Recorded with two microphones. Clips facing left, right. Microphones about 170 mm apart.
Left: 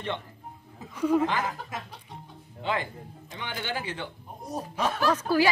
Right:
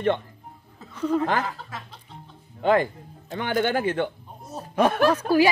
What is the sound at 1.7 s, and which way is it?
Music, 15° left (ahead or behind).